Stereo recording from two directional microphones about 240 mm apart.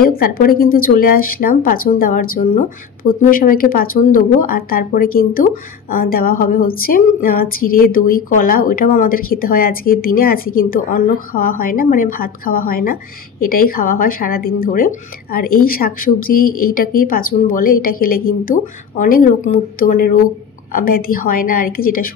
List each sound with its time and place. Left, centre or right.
0.0 s a woman's voice: left